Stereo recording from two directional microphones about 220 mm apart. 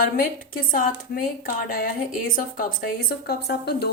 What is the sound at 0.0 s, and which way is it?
Speech, 40° left (ahead or behind).